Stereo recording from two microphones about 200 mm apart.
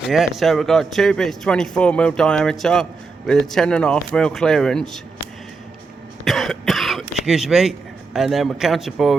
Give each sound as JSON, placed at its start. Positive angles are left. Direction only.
{"t": 0.1, "sound": "a man's voice", "side_deg": 0}
{"t": 6.2, "sound": "speech", "side_deg": 0}